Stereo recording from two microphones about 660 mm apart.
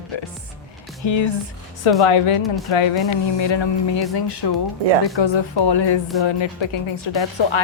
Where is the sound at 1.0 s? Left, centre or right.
Left.